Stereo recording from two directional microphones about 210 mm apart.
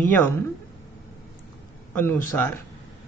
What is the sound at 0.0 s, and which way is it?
Speech, 10° left (ahead or behind).